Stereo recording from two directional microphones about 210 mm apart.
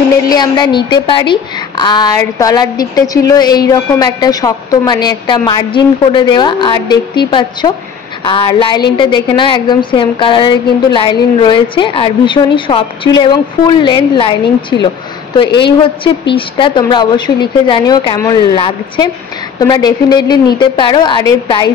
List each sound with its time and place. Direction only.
0.3 s a woman's voice: 20° left (ahead or behind)